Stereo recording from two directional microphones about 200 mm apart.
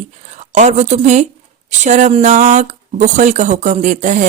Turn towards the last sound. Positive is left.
turn(degrees=-40)  # may be behind; listen again after turning